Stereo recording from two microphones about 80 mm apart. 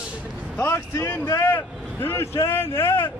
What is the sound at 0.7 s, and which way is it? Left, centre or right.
Speech, left.